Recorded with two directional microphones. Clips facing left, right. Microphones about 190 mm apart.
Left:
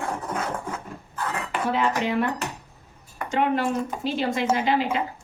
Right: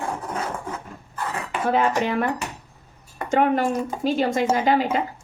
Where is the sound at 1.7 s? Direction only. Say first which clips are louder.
Right 4 dB; 45° right (ahead or behind).